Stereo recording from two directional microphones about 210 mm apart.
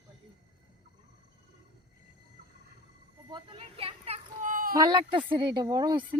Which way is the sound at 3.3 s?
25° right (ahead or behind).